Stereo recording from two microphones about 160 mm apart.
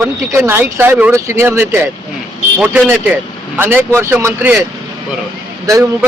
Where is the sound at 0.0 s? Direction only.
15° right (ahead or behind).